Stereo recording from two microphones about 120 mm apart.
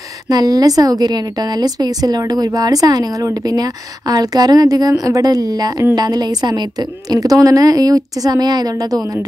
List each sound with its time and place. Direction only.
0.3 s a woman's voice: 30° right (ahead or behind)